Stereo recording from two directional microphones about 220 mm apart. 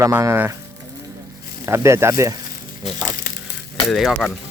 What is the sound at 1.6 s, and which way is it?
Speech, 15° right (ahead or behind).